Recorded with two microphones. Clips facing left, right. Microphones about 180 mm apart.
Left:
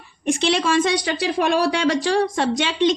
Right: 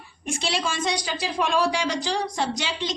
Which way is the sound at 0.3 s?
60° left (ahead or behind).